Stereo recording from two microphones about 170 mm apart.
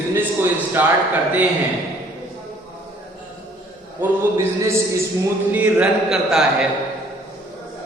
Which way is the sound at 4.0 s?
15° right (ahead or behind).